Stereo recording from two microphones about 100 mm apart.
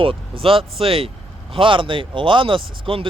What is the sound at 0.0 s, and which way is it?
Speech, 65° right (ahead or behind).